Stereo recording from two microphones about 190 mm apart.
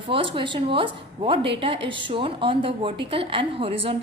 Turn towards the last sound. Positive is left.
turn(degrees=-30)  # may be behind; listen again after turning